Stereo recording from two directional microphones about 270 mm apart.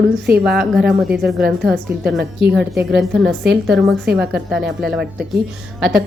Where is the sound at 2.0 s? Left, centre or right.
Right.